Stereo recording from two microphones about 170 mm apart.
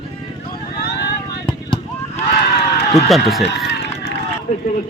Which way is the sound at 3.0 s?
Centre (ahead or behind).